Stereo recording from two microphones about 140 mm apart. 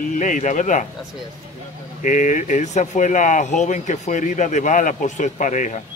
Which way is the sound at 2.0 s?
65° left (ahead or behind).